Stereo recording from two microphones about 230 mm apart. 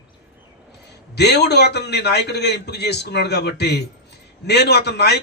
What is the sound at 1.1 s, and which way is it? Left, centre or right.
A man's voice, left.